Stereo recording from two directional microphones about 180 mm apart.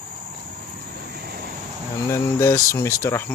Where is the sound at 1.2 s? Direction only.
60° right (ahead or behind).